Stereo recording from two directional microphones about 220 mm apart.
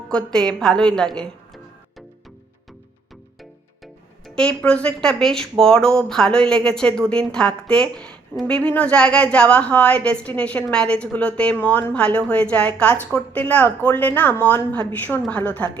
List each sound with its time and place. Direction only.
0.1 s a woman's voice: 5° left (ahead or behind)
4.4 s a woman's voice: 5° left (ahead or behind)